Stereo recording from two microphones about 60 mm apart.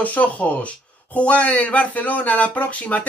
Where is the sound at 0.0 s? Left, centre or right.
Left.